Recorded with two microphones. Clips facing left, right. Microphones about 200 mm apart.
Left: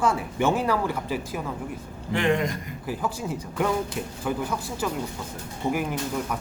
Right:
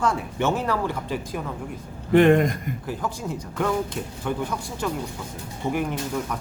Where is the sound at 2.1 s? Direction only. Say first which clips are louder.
Right 8 dB; 55° right (ahead or behind).